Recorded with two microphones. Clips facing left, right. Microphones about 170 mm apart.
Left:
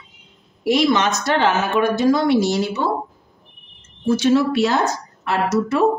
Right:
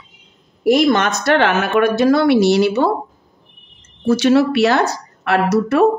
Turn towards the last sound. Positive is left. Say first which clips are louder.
# right 4 dB
turn(degrees=-65)  # may be behind; listen again after turning